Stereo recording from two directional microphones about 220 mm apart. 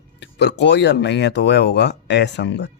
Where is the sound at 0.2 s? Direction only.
50° left (ahead or behind).